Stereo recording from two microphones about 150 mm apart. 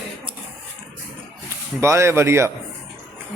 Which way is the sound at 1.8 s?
20° right (ahead or behind).